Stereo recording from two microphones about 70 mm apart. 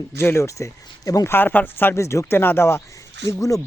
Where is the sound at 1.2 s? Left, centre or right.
Left.